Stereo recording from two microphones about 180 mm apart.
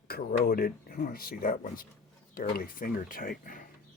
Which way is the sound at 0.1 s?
55° left (ahead or behind).